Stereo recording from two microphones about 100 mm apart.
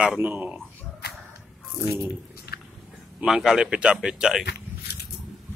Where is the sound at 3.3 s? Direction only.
5° right (ahead or behind).